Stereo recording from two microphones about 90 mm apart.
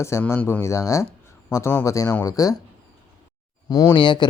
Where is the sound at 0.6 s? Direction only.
35° left (ahead or behind).